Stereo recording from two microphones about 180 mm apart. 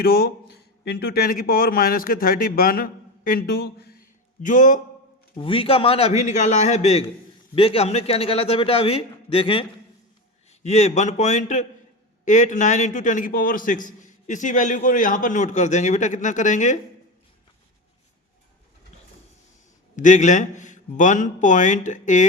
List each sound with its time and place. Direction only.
0.0 s a man's voice: 60° left (ahead or behind)
4.4 s a man's voice: 45° left (ahead or behind)
5.4 s a man's voice: 30° left (ahead or behind)
20.0 s a man's voice: 45° left (ahead or behind)